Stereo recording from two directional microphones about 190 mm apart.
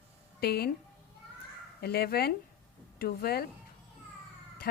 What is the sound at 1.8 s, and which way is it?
A woman's voice, 55° left (ahead or behind).